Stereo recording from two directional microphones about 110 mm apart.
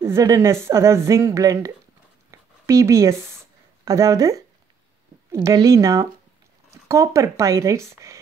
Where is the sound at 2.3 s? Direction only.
30° right (ahead or behind).